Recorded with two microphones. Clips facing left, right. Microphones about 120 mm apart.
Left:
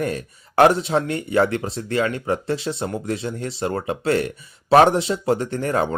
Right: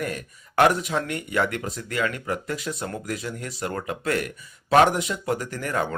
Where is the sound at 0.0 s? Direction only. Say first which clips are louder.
Left 5 dB; 30° left (ahead or behind).